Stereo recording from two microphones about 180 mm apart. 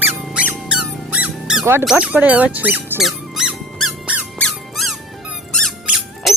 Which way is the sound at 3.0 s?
Centre (ahead or behind).